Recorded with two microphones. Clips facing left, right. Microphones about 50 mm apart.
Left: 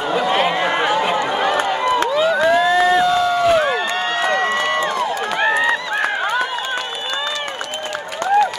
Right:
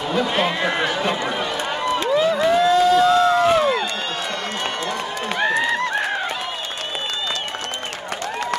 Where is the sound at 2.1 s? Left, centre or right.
Left.